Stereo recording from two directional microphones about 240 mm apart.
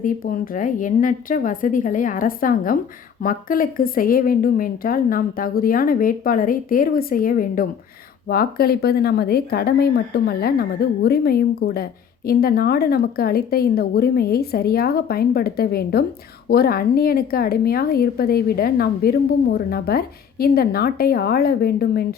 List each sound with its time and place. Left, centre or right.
0.0 s speech: left